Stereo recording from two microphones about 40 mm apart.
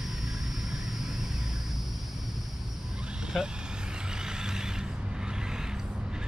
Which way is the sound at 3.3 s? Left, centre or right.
Centre.